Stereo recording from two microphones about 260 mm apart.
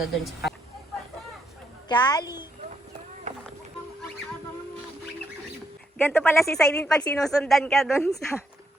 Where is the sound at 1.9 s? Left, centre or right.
Centre.